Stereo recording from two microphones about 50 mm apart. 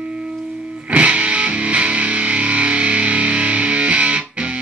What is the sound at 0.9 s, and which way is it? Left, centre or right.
Music, right.